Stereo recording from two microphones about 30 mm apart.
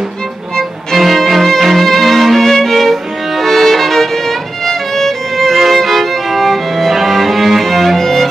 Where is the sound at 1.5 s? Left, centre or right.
Centre.